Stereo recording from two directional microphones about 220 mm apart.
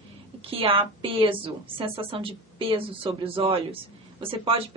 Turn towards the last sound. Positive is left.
turn(degrees=-25)  # may be behind; listen again after turning